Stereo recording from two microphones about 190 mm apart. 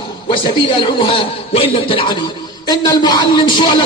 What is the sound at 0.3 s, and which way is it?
A man's voice, 25° left (ahead or behind).